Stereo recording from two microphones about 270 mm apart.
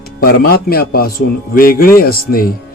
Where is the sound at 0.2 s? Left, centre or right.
Left.